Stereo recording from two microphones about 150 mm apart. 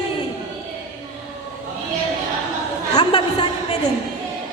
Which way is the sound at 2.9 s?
35° left (ahead or behind).